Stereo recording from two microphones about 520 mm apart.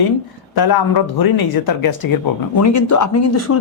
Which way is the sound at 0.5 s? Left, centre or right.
Left.